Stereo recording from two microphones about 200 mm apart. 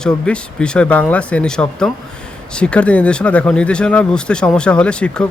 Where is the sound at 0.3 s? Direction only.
5° left (ahead or behind).